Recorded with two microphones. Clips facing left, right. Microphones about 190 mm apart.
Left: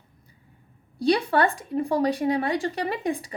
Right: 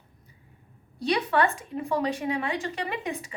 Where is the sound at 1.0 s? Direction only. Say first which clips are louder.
Left 3 dB; 35° left (ahead or behind).